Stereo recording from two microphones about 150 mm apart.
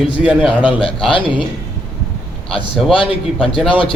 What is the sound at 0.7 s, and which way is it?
Speech, 35° left (ahead or behind).